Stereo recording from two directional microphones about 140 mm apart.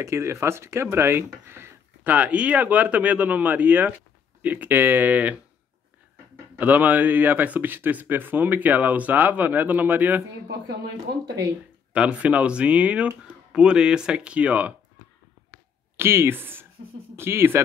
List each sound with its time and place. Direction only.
0.0 s speech: 20° right (ahead or behind)
6.5 s speech: 10° right (ahead or behind)
11.9 s speech: 10° right (ahead or behind)
16.0 s speech: 20° right (ahead or behind)